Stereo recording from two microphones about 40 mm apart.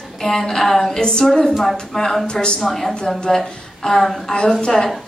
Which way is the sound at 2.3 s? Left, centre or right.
Left.